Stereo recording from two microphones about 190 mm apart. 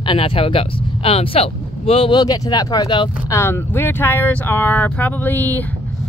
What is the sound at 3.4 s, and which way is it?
Speech, 10° left (ahead or behind).